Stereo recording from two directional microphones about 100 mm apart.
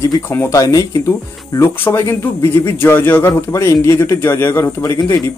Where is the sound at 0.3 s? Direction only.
25° left (ahead or behind).